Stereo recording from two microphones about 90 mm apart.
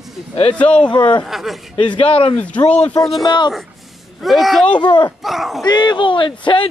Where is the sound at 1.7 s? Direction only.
90° left.